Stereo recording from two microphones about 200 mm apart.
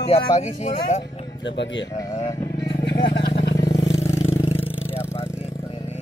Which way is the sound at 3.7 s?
60° left (ahead or behind).